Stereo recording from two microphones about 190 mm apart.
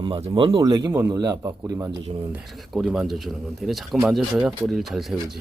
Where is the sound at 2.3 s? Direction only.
Centre (ahead or behind).